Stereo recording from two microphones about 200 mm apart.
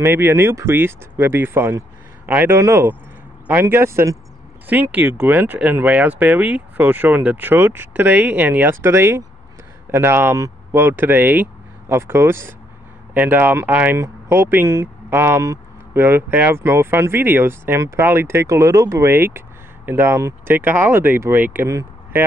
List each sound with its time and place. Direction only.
0.0 s speech: 10° right (ahead or behind)